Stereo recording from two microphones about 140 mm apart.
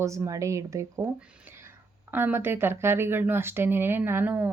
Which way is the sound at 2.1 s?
15° right (ahead or behind).